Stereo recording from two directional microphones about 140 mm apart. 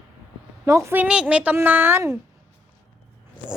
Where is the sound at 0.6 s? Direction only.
20° right (ahead or behind).